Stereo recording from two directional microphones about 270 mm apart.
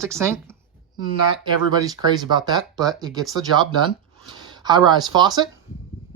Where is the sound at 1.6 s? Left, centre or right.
Centre.